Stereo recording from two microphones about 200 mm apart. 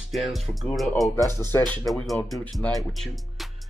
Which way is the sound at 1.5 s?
10° left (ahead or behind).